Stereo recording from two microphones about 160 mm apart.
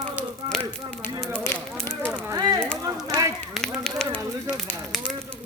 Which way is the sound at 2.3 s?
20° right (ahead or behind).